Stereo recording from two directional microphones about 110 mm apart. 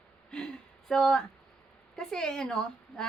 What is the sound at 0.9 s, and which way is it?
A woman's voice, 5° left (ahead or behind).